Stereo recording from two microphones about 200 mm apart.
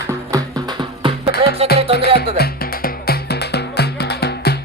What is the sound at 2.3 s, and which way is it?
Music, 50° left (ahead or behind).